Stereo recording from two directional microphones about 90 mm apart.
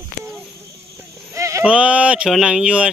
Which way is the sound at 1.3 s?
35° right (ahead or behind).